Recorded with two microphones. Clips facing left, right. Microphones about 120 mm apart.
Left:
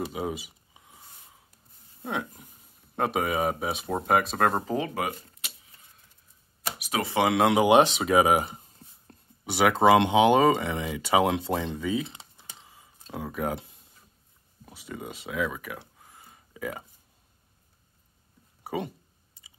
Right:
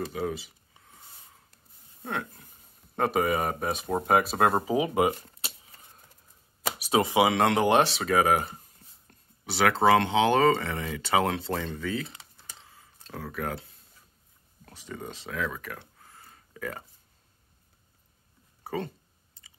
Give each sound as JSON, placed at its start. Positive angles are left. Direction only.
{"t": 0.0, "sound": "a sound", "side_deg": 15}
{"t": 2.0, "sound": "speech", "side_deg": 5}
{"t": 6.8, "sound": "speech", "side_deg": -25}
{"t": 7.2, "sound": "speech", "side_deg": 5}
{"t": 12.1, "sound": "computer keyboard", "side_deg": 20}
{"t": 14.6, "sound": "speech", "side_deg": 10}
{"t": 18.6, "sound": "a sound", "side_deg": 10}